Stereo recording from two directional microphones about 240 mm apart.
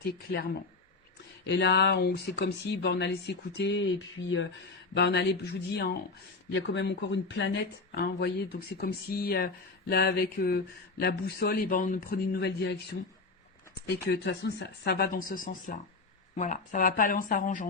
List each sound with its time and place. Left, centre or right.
0.3 s speech: left
13.8 s speech: left